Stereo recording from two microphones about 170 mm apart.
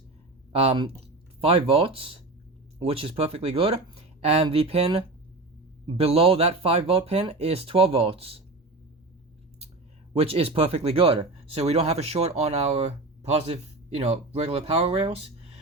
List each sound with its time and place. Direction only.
0.5 s speech: 35° right (ahead or behind)
10.2 s speech: 35° right (ahead or behind)